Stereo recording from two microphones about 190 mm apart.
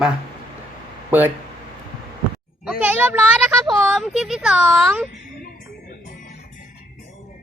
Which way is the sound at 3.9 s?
Centre (ahead or behind).